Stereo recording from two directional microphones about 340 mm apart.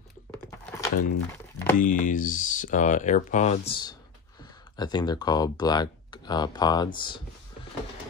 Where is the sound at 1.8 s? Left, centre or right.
Left.